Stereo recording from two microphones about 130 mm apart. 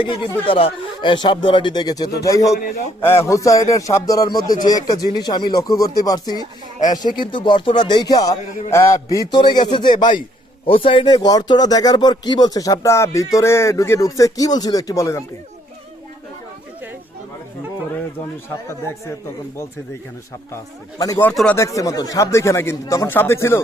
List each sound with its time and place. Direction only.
0.0 s speech: 40° left (ahead or behind)
18.4 s speech: 20° left (ahead or behind)
21.5 s speech: 25° left (ahead or behind)